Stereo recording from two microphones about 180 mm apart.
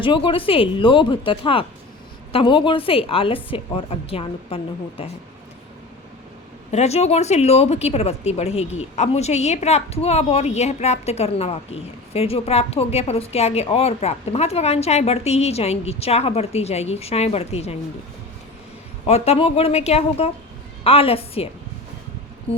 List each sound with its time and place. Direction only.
0.0 s a woman's voice: 30° left (ahead or behind)
6.7 s speech: 40° left (ahead or behind)
19.0 s speech: 35° left (ahead or behind)